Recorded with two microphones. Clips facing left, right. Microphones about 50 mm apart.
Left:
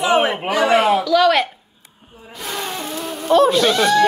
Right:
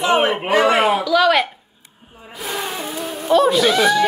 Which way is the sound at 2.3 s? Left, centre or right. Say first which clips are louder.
Right 1 dB; centre.